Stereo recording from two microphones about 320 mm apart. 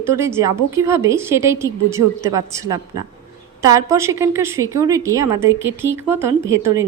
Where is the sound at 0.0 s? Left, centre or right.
Centre.